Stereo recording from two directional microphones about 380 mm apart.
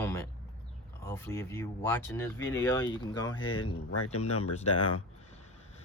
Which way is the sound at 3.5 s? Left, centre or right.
Left.